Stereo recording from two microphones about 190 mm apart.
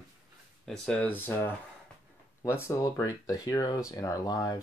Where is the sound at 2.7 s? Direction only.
15° left (ahead or behind).